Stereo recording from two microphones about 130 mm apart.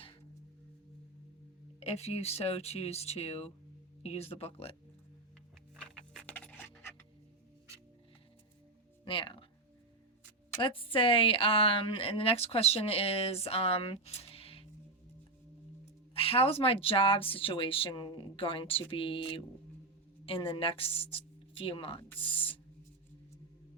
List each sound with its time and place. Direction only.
1.8 s a woman's voice: 55° left (ahead or behind)
5.8 s music: 10° left (ahead or behind)
9.0 s music: 45° left (ahead or behind)
10.6 s a woman's voice: 45° left (ahead or behind)
16.1 s a woman's voice: 50° left (ahead or behind)